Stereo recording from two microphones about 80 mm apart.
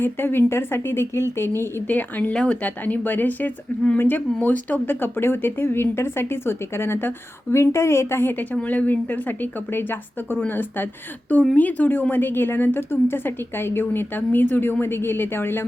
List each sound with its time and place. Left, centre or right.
0.0 s speech: left
1.9 s speech: left